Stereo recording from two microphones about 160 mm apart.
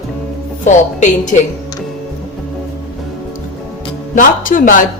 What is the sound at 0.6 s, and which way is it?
Music, 50° left (ahead or behind).